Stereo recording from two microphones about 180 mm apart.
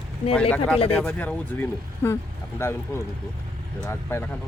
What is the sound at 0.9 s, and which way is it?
Speech, 10° left (ahead or behind).